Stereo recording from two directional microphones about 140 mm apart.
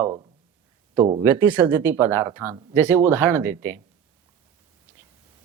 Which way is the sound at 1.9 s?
15° right (ahead or behind).